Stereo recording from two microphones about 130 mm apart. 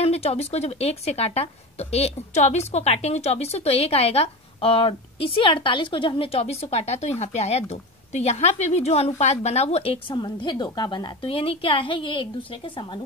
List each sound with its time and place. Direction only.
0.0 s a woman's voice: 50° left (ahead or behind)
10.1 s a woman's voice: 35° left (ahead or behind)